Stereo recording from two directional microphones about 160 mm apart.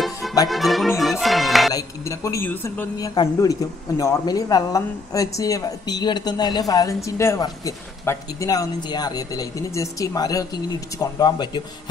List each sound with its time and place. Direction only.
0.5 s music: centre (ahead or behind)
1.7 s speech: 20° left (ahead or behind)